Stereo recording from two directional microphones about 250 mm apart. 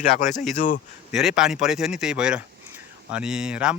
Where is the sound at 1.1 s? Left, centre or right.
Centre.